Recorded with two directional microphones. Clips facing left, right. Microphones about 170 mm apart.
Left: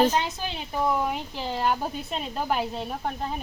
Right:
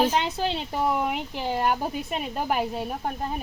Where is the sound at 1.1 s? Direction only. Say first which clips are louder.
Right 2 dB; 10° right (ahead or behind).